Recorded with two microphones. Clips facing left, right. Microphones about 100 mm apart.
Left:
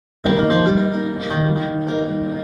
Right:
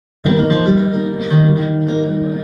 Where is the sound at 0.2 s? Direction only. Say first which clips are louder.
Right 2 dB; 40° left (ahead or behind).